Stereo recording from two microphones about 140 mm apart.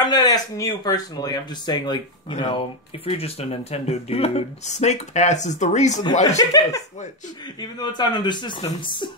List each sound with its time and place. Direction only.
0.0 s speech: 30° left (ahead or behind); by 5.9 s 55° left (ahead or behind)
6.3 s speech: 25° left (ahead or behind)
7.8 s speech: 30° left (ahead or behind)